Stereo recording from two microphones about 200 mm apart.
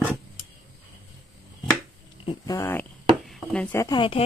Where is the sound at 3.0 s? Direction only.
Centre (ahead or behind); by 4.2 s 25° left (ahead or behind).